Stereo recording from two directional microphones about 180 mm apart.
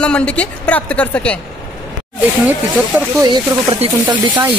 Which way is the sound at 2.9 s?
15° right (ahead or behind).